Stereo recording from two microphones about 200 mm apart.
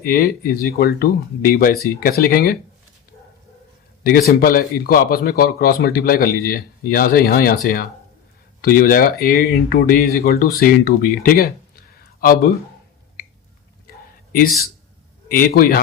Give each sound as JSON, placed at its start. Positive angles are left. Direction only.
{"t": 0.0, "sound": "speech", "side_deg": 45}
{"t": 4.0, "sound": "speech", "side_deg": 50}
{"t": 15.3, "sound": "speech", "side_deg": 45}